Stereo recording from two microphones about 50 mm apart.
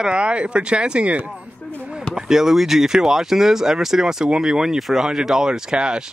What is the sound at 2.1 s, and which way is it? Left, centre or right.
Speech, centre.